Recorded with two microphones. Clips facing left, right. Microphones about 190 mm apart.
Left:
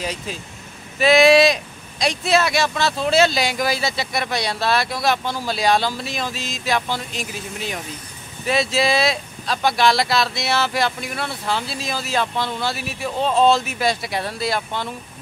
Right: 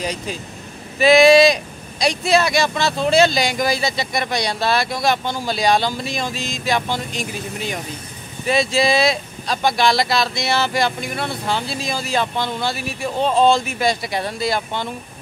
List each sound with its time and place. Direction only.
0.0 s speech: centre (ahead or behind)